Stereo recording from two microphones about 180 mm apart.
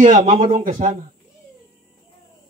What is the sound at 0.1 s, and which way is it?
Speech, 45° right (ahead or behind).